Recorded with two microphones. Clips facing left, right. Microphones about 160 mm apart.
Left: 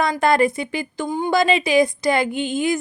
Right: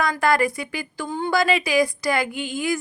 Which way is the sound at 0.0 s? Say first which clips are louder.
Left 3 dB; 25° left (ahead or behind).